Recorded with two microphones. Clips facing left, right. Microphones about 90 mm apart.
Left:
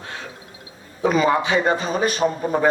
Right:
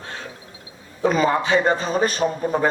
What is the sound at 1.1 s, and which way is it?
Speech, 35° right (ahead or behind).